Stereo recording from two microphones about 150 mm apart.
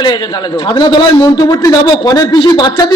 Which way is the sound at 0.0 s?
30° left (ahead or behind).